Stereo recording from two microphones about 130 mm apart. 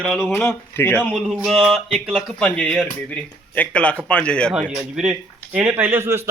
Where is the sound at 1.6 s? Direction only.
5° left (ahead or behind).